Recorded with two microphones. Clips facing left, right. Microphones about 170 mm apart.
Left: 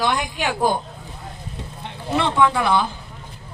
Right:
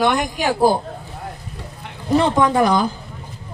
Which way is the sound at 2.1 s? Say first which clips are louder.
Right 3 dB; 40° right (ahead or behind).